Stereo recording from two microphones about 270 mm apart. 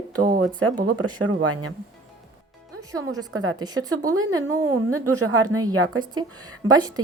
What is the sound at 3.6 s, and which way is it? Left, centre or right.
Speech, centre.